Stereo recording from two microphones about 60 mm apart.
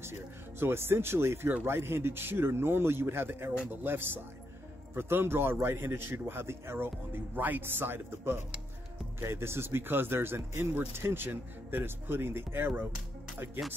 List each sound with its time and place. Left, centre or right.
0.0 s a man's voice: right
7.3 s a man's voice: right